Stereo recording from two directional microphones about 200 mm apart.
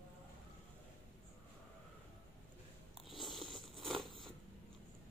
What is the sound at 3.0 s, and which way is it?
Biting, centre (ahead or behind).